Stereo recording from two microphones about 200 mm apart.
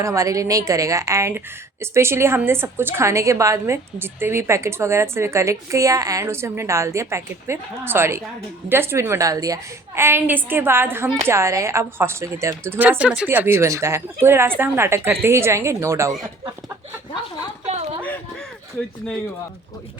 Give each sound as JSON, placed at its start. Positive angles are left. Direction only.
{"t": 0.0, "sound": "a woman's voice", "side_deg": -15}
{"t": 17.7, "sound": "speech", "side_deg": -35}